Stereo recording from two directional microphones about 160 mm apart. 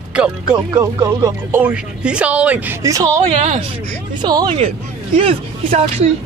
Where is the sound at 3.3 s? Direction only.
45° right (ahead or behind).